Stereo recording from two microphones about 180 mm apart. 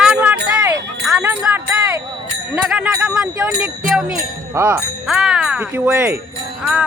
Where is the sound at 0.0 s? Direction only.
5° right (ahead or behind).